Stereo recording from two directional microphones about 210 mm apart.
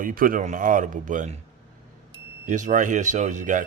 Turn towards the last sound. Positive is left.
turn(degrees=-35)  # may be behind; listen again after turning